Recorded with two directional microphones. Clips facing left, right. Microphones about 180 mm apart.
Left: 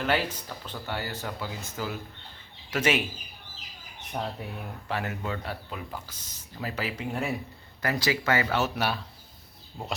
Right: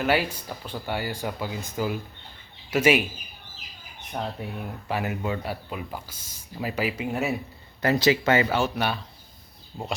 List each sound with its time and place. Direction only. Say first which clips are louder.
0.0 s speech: right 3 dB; 10° right (ahead or behind)
4.1 s speech: right 1 dB; centre (ahead or behind)
4.9 s speech: right 4 dB; 10° right (ahead or behind)
7.8 s speech: right 7 dB; 25° right (ahead or behind)
8.5 s speech: right 2 dB; 5° left (ahead or behind)